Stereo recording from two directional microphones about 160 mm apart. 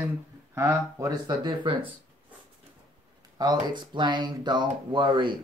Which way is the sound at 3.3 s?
25° right (ahead or behind).